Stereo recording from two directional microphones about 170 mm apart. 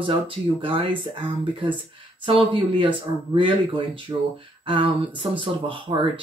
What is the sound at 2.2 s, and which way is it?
Speech, 30° right (ahead or behind).